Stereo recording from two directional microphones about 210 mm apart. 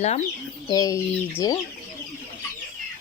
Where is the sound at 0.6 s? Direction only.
15° left (ahead or behind).